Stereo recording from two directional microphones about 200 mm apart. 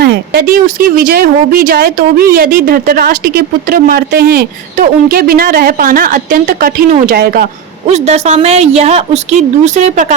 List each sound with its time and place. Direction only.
0.0 s speech: 50° right (ahead or behind)
7.9 s a woman's voice: 35° right (ahead or behind)